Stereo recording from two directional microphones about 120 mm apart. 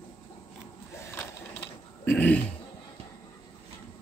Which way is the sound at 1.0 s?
15° left (ahead or behind).